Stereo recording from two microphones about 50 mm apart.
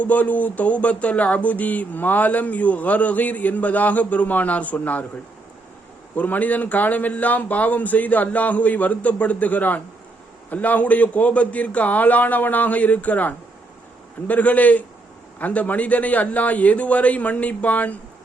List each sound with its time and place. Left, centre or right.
0.0 s speech: left
6.1 s speech: left